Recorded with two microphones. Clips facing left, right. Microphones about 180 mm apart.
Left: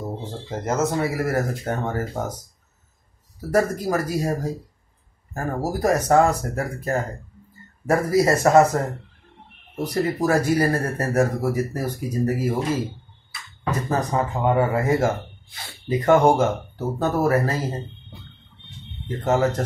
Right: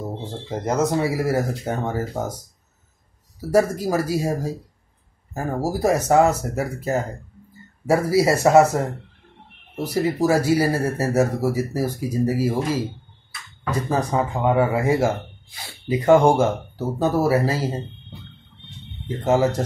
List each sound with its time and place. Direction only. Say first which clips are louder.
0.3 s speech: right 2 dB; 15° right (ahead or behind)
9.8 s speech: right 2 dB; 10° right (ahead or behind)
19.0 s speech: right 2 dB; 10° right (ahead or behind)